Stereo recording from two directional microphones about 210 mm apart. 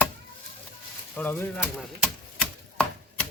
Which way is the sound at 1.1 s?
10° left (ahead or behind).